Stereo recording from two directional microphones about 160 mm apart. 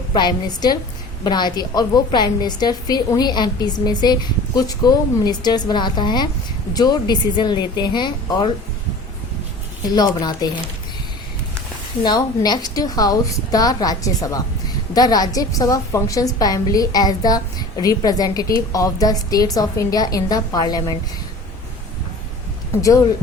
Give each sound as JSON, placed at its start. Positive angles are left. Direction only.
{"t": 0.1, "sound": "a woman's voice", "side_deg": 25}
{"t": 9.9, "sound": "a woman's voice", "side_deg": 25}
{"t": 12.0, "sound": "a woman's voice", "side_deg": 25}
{"t": 22.7, "sound": "speech", "side_deg": 20}